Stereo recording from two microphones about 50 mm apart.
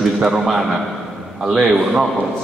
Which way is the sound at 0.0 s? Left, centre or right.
Centre.